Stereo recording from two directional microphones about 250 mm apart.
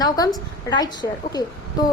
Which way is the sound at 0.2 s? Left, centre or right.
Centre.